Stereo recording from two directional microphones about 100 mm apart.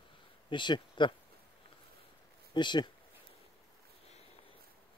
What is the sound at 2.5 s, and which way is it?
Speech, 50° left (ahead or behind).